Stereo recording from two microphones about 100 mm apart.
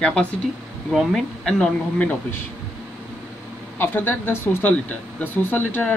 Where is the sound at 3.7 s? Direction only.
20° left (ahead or behind).